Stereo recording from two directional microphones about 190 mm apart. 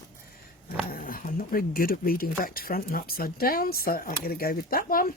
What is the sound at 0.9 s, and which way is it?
Speech, 45° left (ahead or behind).